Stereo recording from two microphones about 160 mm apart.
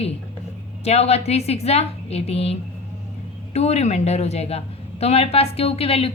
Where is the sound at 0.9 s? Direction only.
40° left (ahead or behind).